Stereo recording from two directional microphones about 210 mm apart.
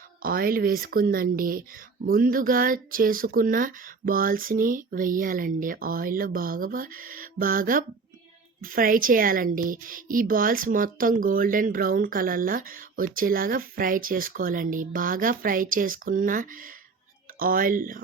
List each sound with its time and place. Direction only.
0.2 s speech: 45° right (ahead or behind)